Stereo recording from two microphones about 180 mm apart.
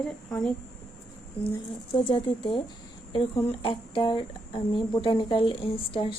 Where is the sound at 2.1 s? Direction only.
30° left (ahead or behind).